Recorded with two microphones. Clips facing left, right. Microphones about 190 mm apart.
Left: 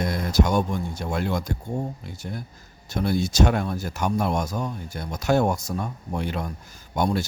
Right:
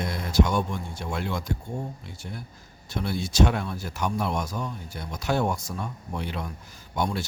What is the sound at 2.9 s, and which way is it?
Speech, 45° left (ahead or behind).